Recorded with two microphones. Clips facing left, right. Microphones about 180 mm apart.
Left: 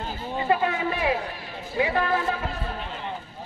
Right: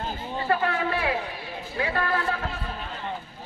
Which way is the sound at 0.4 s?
15° left (ahead or behind).